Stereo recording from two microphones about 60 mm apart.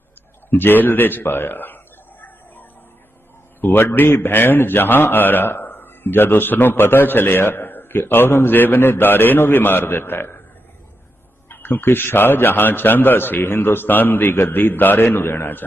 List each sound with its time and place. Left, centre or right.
0.5 s a man's voice: left
3.6 s a man's voice: left
11.4 s a man's voice: left